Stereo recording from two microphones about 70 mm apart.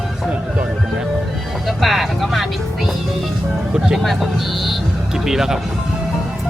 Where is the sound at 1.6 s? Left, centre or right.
Centre.